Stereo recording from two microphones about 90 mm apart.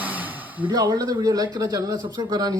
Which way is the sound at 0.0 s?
20° right (ahead or behind).